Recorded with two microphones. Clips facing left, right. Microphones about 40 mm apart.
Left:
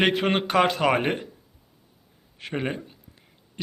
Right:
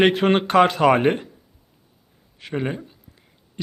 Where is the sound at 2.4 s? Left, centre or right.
Centre.